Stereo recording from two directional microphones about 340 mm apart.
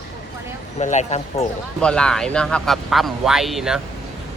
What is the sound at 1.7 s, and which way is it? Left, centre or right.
Speech, centre.